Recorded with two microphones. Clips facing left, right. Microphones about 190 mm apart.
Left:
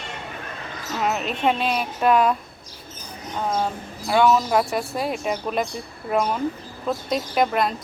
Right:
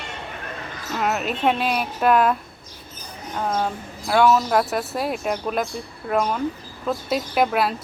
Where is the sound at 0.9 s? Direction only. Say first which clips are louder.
Right 1 dB; centre (ahead or behind).